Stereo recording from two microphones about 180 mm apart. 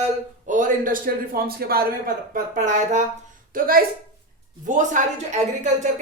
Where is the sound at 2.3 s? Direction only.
45° right (ahead or behind).